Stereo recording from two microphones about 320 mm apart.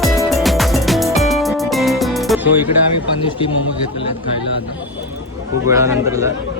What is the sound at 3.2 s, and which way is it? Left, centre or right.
Speech, centre.